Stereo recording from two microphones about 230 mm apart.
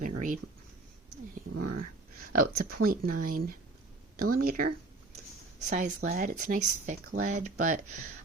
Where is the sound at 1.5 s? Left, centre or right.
Right.